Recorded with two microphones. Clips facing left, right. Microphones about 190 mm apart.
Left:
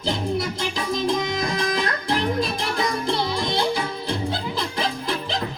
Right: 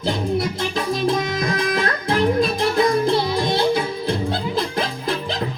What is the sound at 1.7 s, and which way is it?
Music, 55° right (ahead or behind).